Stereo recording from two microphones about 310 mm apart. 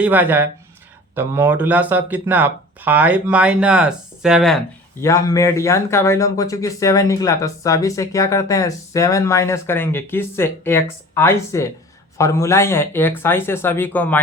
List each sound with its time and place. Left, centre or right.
0.0 s speech: centre